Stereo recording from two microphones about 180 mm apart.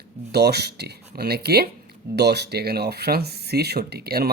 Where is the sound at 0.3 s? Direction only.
65° right (ahead or behind).